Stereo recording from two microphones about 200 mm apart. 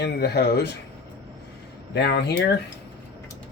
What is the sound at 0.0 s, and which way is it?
Speech, 55° left (ahead or behind).